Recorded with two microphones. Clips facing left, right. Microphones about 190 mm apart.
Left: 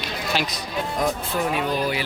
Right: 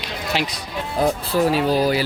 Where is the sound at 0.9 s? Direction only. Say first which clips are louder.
Right 6 dB; 30° right (ahead or behind).